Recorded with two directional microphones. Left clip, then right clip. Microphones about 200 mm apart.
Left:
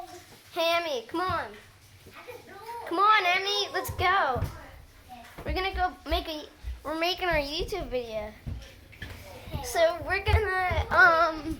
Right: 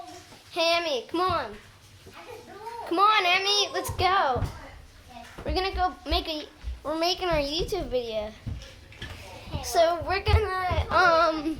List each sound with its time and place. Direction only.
0.5 s a child's voice: 5° right (ahead or behind)
1.2 s a woman's voice: 25° right (ahead or behind)
2.9 s a child's voice: 15° right (ahead or behind)
5.5 s a child's voice: 10° right (ahead or behind)
9.6 s a child's voice: 15° right (ahead or behind)
10.5 s a sound: 5° right (ahead or behind)
10.9 s a child's voice: 15° right (ahead or behind)